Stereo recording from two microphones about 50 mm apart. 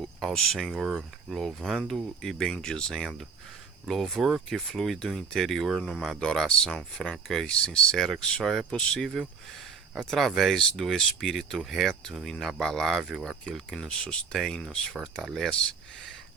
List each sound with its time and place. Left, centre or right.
0.0 s a sound: centre
0.3 s speech: centre
8.8 s speech: centre
9.0 s speech: centre
13.7 s speech: centre
14.6 s speech: centre
15.2 s speech: centre
15.5 s speech: centre